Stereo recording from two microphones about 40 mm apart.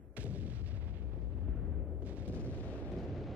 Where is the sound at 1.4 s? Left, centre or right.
Centre.